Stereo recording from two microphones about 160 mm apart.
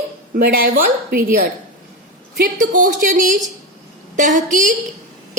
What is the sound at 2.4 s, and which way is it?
A woman's voice, 55° right (ahead or behind).